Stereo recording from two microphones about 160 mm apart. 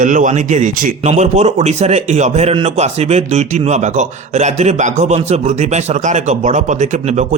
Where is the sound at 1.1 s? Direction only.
45° right (ahead or behind).